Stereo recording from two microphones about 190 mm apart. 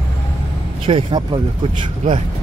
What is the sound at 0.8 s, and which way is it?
Speech, 30° right (ahead or behind).